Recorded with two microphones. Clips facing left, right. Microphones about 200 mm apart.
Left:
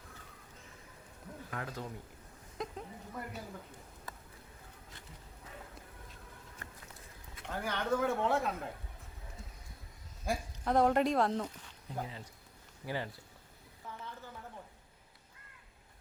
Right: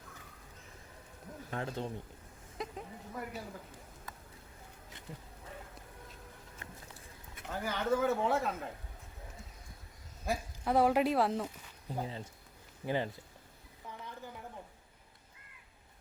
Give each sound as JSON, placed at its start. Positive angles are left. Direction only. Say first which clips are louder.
{"t": 1.5, "sound": "speech", "louder": "right 4 dB", "side_deg": -30}
{"t": 2.6, "sound": "speech", "louder": "even", "side_deg": 0}
{"t": 7.4, "sound": "speech", "louder": "right 1 dB", "side_deg": -5}
{"t": 10.2, "sound": "speech", "louder": "even", "side_deg": -5}
{"t": 12.0, "sound": "speech", "louder": "right 4 dB", "side_deg": -30}